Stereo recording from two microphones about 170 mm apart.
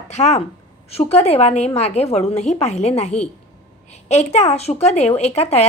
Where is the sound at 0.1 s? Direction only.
40° left (ahead or behind).